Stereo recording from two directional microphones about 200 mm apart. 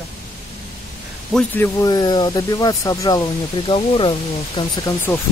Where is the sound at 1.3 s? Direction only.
15° left (ahead or behind).